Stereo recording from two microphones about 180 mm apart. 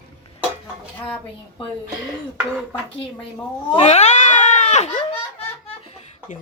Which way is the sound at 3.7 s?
35° left (ahead or behind).